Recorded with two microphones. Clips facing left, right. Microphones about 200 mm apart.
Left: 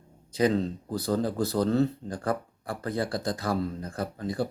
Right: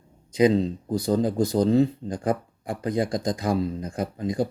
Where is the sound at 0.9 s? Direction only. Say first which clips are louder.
Right 5 dB; 15° right (ahead or behind).